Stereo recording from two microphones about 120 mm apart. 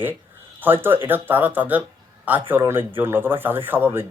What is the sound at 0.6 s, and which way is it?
Speech, 15° right (ahead or behind).